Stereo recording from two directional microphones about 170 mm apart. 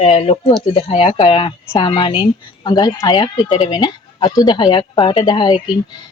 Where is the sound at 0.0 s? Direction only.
35° left (ahead or behind).